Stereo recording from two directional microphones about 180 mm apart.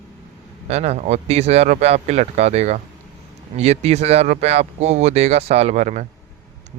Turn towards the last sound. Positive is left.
turn(degrees=-40)  # may be behind; listen again after turning